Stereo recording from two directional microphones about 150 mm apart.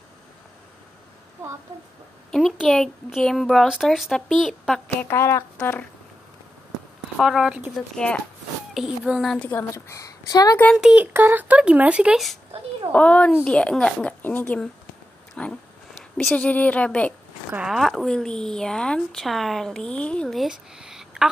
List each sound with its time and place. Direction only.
2.3 s speech: 5° left (ahead or behind)
5.0 s speech: 20° left (ahead or behind)
7.2 s speech: centre (ahead or behind)
7.9 s speech: 10° left (ahead or behind)
8.7 s speech: 5° right (ahead or behind)
9.5 s speech: 15° left (ahead or behind)
10.8 s speech: 10° right (ahead or behind)
12.9 s speech: 10° left (ahead or behind)
17.5 s speech: 5° right (ahead or behind)